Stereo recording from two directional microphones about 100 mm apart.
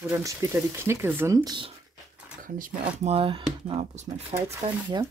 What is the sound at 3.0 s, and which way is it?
Speech, 70° right (ahead or behind).